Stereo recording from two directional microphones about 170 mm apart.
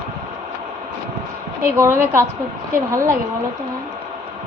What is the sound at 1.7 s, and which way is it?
A woman's voice, 15° right (ahead or behind).